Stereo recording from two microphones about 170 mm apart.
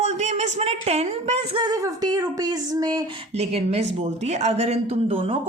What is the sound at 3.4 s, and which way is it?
Speech, 35° right (ahead or behind).